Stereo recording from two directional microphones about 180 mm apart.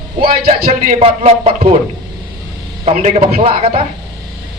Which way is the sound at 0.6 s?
50° right (ahead or behind).